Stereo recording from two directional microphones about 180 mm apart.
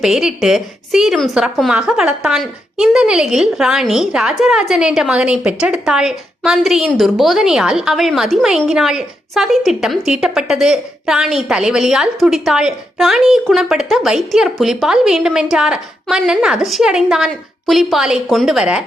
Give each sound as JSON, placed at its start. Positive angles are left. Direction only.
{"t": 0.0, "sound": "a woman's voice", "side_deg": -5}